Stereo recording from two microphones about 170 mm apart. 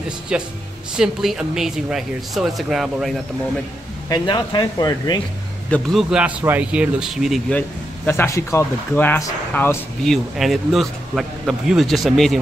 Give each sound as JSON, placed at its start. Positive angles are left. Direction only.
{"t": 0.3, "sound": "a man's voice", "side_deg": -5}
{"t": 4.1, "sound": "speech", "side_deg": 25}
{"t": 5.7, "sound": "a man's voice", "side_deg": 0}
{"t": 10.0, "sound": "a man's voice", "side_deg": 0}